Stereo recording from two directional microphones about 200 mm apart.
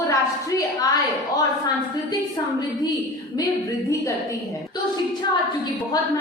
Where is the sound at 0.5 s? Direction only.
20° left (ahead or behind).